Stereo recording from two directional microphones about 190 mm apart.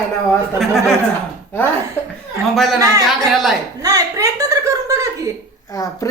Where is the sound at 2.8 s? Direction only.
15° right (ahead or behind).